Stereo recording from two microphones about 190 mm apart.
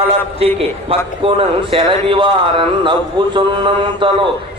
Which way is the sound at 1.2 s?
30° right (ahead or behind).